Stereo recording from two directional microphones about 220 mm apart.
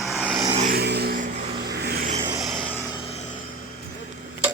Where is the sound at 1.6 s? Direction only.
45° right (ahead or behind).